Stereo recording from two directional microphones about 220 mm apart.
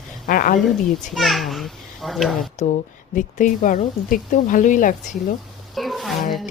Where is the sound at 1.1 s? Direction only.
Centre (ahead or behind).